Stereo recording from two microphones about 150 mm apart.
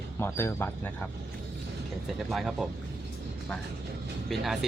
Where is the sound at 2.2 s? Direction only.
Centre (ahead or behind).